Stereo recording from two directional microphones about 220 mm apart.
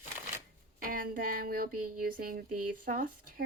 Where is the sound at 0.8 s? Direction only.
40° right (ahead or behind).